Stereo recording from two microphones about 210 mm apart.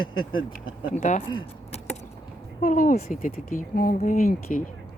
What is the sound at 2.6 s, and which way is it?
Speech, 40° left (ahead or behind).